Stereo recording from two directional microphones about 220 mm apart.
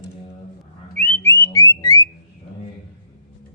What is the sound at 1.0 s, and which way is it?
Music, 10° left (ahead or behind).